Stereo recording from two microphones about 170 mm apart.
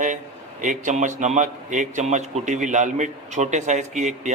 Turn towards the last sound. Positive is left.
turn(degrees=-45)  # may be behind; listen again after turning